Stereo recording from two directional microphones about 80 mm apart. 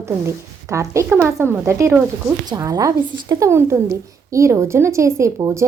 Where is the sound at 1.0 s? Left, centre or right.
Right.